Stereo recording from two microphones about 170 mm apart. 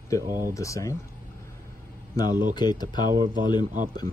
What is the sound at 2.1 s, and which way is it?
Speech, 25° left (ahead or behind).